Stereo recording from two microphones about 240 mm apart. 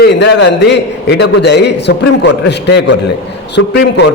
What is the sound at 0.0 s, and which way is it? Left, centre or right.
A man's voice, left.